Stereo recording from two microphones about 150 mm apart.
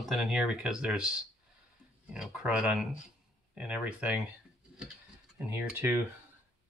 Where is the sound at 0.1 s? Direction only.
5° right (ahead or behind).